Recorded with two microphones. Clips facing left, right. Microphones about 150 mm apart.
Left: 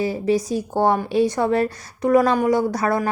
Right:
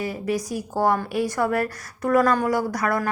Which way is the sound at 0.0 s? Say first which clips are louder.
Left 6 dB; 30° left (ahead or behind).